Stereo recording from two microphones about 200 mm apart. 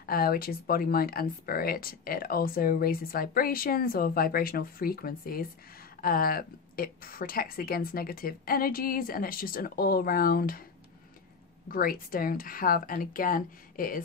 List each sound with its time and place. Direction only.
0.0 s speech: 45° left (ahead or behind)
11.7 s speech: 45° left (ahead or behind)